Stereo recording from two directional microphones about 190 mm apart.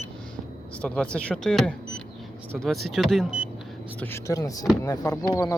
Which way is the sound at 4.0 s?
10° left (ahead or behind).